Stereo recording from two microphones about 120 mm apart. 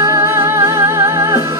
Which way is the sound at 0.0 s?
20° right (ahead or behind).